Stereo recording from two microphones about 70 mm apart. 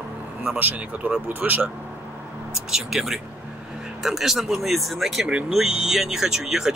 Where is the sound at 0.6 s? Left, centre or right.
Right.